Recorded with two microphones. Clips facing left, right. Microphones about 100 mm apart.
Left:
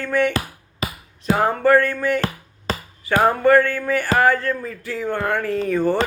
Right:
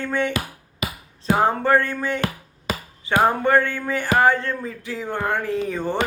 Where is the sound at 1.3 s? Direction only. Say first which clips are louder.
Left 2 dB; 25° right (ahead or behind).